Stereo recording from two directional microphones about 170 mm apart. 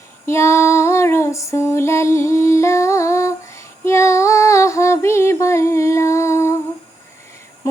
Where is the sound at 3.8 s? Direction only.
15° left (ahead or behind).